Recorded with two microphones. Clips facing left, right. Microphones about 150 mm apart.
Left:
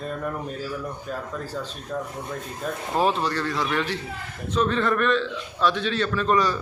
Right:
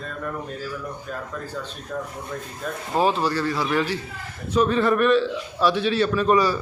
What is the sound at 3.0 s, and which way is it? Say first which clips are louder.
A man's voice: right 2 dB; centre (ahead or behind).